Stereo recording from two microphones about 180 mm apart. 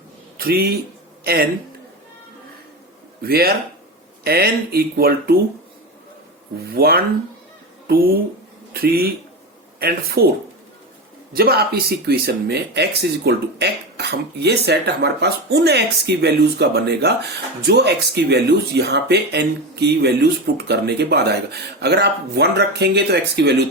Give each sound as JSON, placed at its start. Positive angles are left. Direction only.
{"t": 0.3, "sound": "speech", "side_deg": -55}
{"t": 3.2, "sound": "speech", "side_deg": -55}
{"t": 6.7, "sound": "speech", "side_deg": -60}
{"t": 11.3, "sound": "speech", "side_deg": -60}